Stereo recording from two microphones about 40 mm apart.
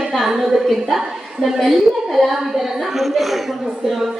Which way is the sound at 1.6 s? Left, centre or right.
Centre.